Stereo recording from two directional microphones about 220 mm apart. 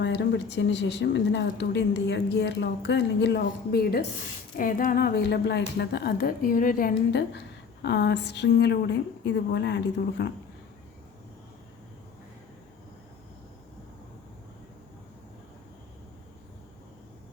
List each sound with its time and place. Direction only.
0.0 s a woman's voice: 50° left (ahead or behind)